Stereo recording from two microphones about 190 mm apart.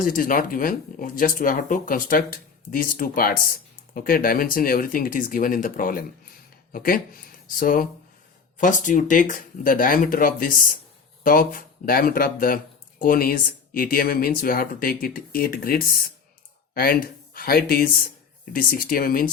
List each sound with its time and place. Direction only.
0.0 s speech: 45° left (ahead or behind)